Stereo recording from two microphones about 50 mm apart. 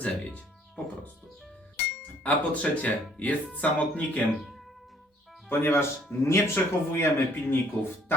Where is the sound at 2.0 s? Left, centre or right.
Left.